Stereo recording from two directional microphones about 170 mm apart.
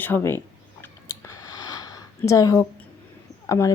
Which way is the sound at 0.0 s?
15° left (ahead or behind).